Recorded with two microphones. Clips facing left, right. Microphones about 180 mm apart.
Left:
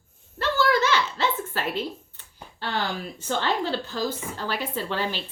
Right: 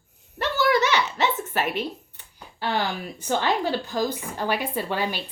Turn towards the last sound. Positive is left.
turn(degrees=-15)  # may be behind; listen again after turning